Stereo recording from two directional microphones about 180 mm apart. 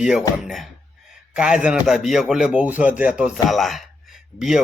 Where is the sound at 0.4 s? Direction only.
Centre (ahead or behind).